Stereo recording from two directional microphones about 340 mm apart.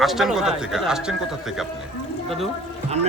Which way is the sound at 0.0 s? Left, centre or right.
Centre.